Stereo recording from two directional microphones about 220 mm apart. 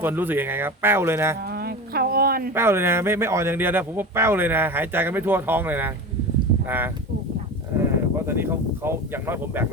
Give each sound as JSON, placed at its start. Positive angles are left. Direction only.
{"t": 0.0, "sound": "speech", "side_deg": -10}
{"t": 1.5, "sound": "a sound", "side_deg": -45}
{"t": 2.6, "sound": "speech", "side_deg": -10}
{"t": 8.3, "sound": "speech", "side_deg": -10}